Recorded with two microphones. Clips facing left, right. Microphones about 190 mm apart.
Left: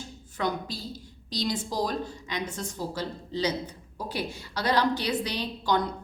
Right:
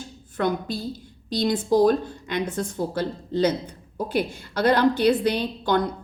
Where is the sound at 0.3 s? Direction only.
55° right (ahead or behind).